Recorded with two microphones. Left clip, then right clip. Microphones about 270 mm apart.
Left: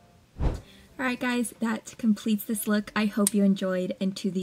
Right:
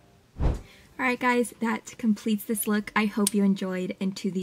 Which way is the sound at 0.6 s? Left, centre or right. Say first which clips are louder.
Right 4 dB; centre.